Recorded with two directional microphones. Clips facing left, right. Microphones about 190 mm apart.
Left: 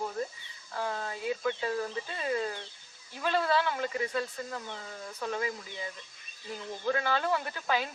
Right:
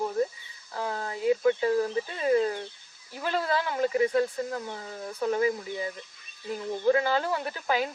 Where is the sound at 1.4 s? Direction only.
25° right (ahead or behind).